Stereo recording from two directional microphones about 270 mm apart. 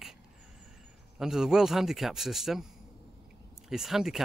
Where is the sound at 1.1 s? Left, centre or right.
Centre.